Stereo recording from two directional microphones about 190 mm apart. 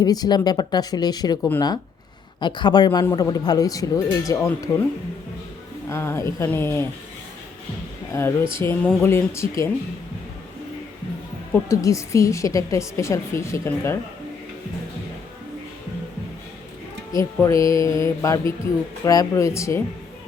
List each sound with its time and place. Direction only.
0.0 s speech: 20° left (ahead or behind)
1.4 s a woman's voice: 10° left (ahead or behind)
2.4 s speech: 25° left (ahead or behind)
5.9 s a woman's voice: 15° left (ahead or behind)
8.5 s a woman's voice: 10° left (ahead or behind)
11.5 s a woman's voice: 15° left (ahead or behind)
17.1 s a woman's voice: 15° left (ahead or behind)